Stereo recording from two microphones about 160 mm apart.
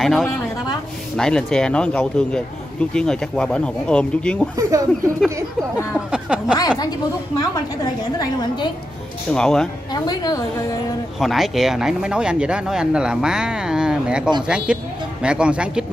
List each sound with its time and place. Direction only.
0.0 s speech: centre (ahead or behind)
4.6 s speech: 20° right (ahead or behind)
5.9 s a sound: 5° right (ahead or behind)
6.8 s a woman's voice: 25° left (ahead or behind)
9.3 s speech: 5° left (ahead or behind)
9.9 s a woman's voice: 25° left (ahead or behind)
11.1 s speech: centre (ahead or behind)